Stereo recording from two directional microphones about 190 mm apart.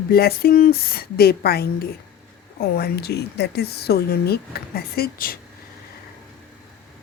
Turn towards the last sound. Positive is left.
turn(degrees=50)  # may be behind; listen again after turning